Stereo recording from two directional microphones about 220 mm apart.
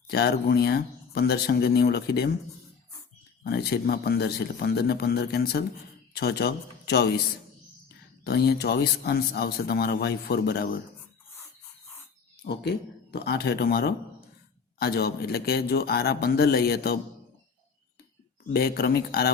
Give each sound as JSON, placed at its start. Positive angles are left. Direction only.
{"t": 0.1, "sound": "speech", "side_deg": 45}
{"t": 3.4, "sound": "speech", "side_deg": 45}
{"t": 8.2, "sound": "speech", "side_deg": 45}
{"t": 12.5, "sound": "speech", "side_deg": 50}
{"t": 18.5, "sound": "speech", "side_deg": 45}